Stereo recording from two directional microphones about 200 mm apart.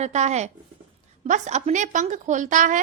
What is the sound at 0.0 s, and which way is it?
Speech, 35° right (ahead or behind).